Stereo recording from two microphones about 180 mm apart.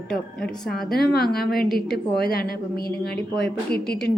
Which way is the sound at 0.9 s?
60° left (ahead or behind).